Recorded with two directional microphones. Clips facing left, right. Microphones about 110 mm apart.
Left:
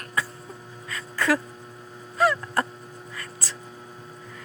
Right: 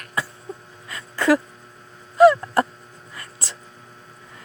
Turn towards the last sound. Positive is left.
turn(degrees=-30)  # may be behind; listen again after turning